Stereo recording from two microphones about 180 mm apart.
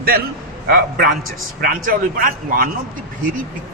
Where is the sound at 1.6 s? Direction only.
50° right (ahead or behind).